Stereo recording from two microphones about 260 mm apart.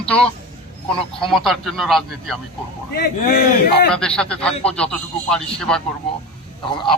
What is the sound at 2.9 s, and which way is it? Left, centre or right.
Speech, left.